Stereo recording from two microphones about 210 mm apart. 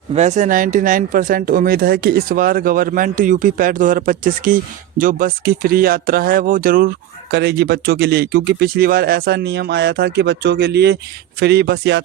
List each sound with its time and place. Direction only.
0.1 s speech: 30° right (ahead or behind); by 12.0 s 55° right (ahead or behind)